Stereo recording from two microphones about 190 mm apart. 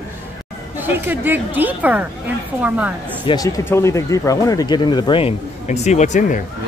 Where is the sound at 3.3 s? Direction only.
20° left (ahead or behind); by 6.4 s 40° left (ahead or behind).